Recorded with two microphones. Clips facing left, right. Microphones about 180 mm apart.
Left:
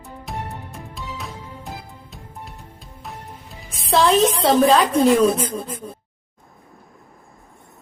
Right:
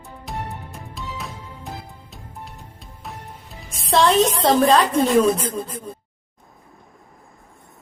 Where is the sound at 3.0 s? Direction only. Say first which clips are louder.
Even; centre (ahead or behind).